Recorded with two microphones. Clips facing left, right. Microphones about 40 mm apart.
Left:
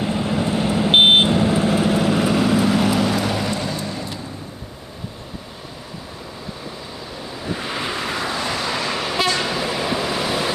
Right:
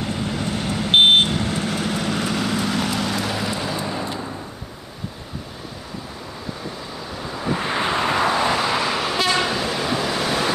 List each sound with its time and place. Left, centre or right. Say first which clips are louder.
0.0 s vehicle: left 4 dB; centre
7.5 s vehicle: right 4 dB; right; by 10.5 s centre